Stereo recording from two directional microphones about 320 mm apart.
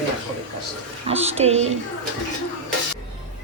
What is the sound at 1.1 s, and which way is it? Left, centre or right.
Speech, centre.